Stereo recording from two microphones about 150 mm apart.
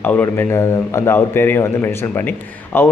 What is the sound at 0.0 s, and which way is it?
A man's voice, 10° left (ahead or behind).